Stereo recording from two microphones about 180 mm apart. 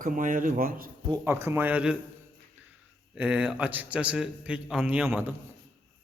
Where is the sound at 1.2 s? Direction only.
15° right (ahead or behind).